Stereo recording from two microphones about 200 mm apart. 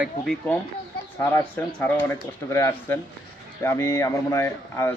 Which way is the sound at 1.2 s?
10° left (ahead or behind).